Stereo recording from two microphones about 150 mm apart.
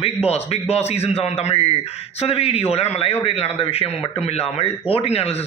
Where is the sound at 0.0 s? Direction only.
40° left (ahead or behind).